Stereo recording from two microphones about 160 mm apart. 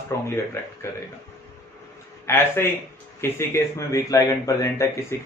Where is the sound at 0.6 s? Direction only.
15° left (ahead or behind).